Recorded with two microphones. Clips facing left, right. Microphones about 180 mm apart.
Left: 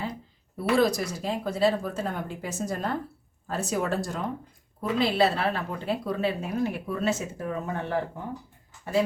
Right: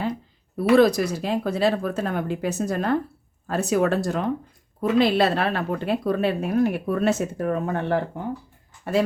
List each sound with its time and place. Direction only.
0.5 s a woman's voice: 65° right (ahead or behind)